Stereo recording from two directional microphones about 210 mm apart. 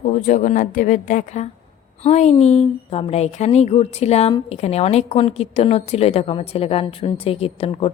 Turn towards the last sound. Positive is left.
turn(degrees=30)  # may be behind; listen again after turning